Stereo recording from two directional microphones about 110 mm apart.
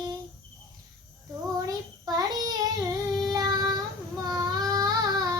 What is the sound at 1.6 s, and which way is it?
Child singing, 35° right (ahead or behind).